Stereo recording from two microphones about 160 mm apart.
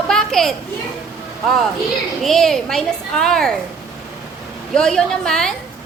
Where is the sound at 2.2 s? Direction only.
Centre (ahead or behind).